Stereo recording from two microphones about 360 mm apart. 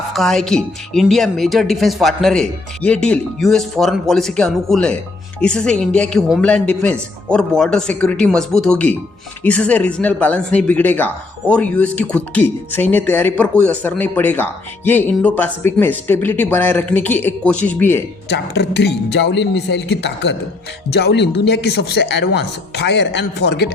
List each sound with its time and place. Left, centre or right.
0.1 s speech: centre
18.3 s speech: left